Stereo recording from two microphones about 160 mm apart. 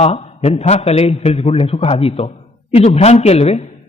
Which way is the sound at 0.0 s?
40° left (ahead or behind).